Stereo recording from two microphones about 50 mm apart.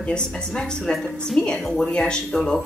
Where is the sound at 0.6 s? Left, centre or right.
Centre.